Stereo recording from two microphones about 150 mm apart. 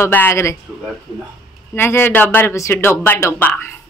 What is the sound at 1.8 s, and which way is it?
Speech, 15° left (ahead or behind).